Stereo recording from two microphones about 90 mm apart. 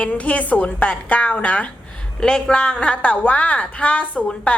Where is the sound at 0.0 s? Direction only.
15° left (ahead or behind).